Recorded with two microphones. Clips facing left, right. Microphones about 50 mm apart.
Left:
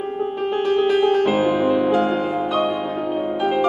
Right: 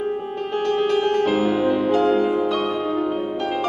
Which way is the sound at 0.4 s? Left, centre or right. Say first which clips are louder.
Left 2 dB; centre.